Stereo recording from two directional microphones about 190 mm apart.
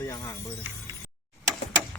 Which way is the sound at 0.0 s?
20° left (ahead or behind).